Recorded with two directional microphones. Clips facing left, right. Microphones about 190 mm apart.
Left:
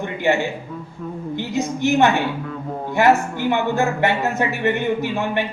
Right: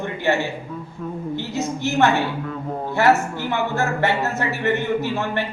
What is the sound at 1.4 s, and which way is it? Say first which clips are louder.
A man's voice: left 5 dB; 15° left (ahead or behind).